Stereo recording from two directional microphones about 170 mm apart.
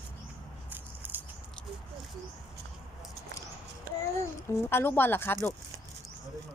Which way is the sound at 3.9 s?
55° right (ahead or behind).